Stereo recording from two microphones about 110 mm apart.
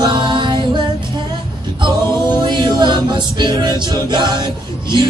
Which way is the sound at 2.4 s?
40° right (ahead or behind).